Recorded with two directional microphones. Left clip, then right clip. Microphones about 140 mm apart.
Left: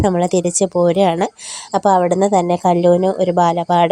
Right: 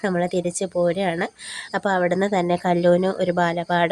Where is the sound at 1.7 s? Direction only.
25° left (ahead or behind).